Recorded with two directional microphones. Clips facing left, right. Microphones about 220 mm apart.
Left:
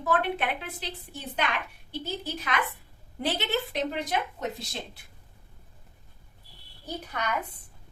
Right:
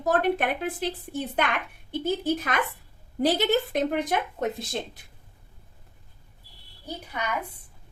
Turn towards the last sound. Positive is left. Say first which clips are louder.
# even
turn(degrees=-10)  # may be behind; listen again after turning